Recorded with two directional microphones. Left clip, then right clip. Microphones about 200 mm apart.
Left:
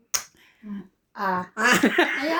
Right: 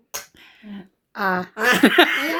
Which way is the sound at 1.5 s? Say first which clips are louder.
Right 4 dB; 35° right (ahead or behind).